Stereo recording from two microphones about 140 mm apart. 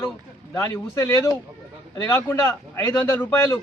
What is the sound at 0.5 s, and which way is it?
A man's voice, 20° left (ahead or behind).